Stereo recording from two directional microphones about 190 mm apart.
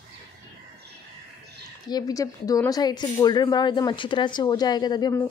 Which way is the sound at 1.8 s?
20° left (ahead or behind).